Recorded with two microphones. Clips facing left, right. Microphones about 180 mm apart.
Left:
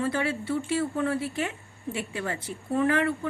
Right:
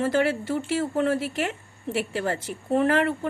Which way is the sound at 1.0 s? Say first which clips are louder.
Right 4 dB; 90° right.